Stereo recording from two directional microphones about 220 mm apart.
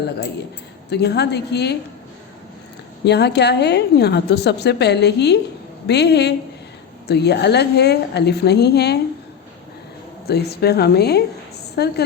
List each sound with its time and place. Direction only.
0.9 s a woman's voice: 50° left (ahead or behind)
3.0 s a woman's voice: 50° left (ahead or behind)
10.2 s a woman's voice: 45° left (ahead or behind)